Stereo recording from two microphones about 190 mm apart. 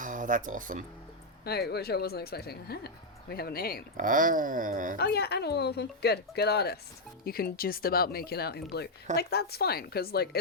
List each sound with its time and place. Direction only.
0.0 s speech: 45° right (ahead or behind)
1.5 s speech: 55° left (ahead or behind)
3.9 s speech: 45° right (ahead or behind)
4.9 s speech: 60° left (ahead or behind)